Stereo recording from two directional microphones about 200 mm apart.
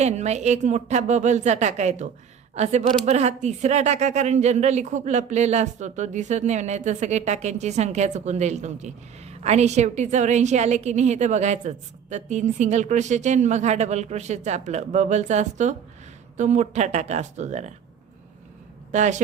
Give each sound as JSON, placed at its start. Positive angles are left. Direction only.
{"t": 0.0, "sound": "speech", "side_deg": -35}
{"t": 18.9, "sound": "speech", "side_deg": -35}